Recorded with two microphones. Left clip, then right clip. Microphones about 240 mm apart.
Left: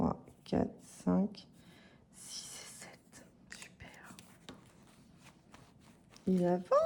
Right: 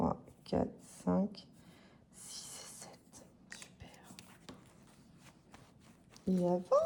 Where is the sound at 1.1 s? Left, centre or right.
Left.